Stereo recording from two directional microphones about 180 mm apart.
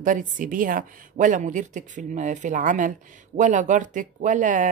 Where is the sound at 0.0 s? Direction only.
45° right (ahead or behind).